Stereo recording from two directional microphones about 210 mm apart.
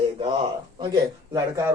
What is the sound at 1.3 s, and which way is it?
Speech, 15° right (ahead or behind).